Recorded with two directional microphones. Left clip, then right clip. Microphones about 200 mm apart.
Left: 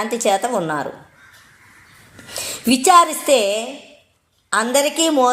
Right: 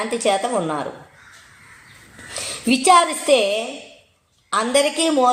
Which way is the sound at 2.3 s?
35° left (ahead or behind).